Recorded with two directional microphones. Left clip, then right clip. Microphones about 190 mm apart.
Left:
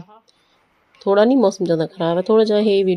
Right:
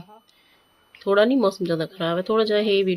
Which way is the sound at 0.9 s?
20° left (ahead or behind).